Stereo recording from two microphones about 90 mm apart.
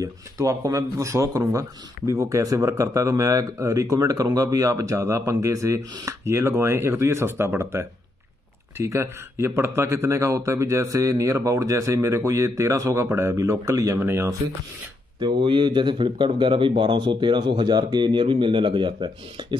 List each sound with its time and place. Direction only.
0.0 s a man's voice: 40° right (ahead or behind)
13.9 s speech: 25° right (ahead or behind)
15.1 s a man's voice: 60° right (ahead or behind)